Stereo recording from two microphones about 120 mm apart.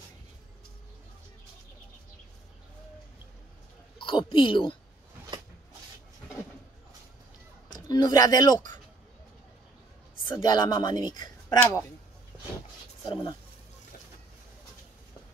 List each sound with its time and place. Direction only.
4.0 s a woman's voice: 45° left (ahead or behind)
7.9 s speech: 30° left (ahead or behind)
10.2 s a woman's voice: 40° left (ahead or behind)
11.4 s speech: 25° left (ahead or behind)
13.0 s a woman's voice: 40° left (ahead or behind)